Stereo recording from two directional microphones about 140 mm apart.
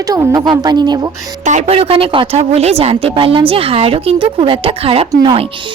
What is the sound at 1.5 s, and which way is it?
A woman's voice, 50° right (ahead or behind).